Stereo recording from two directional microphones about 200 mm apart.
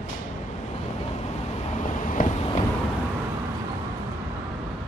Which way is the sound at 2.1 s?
40° left (ahead or behind).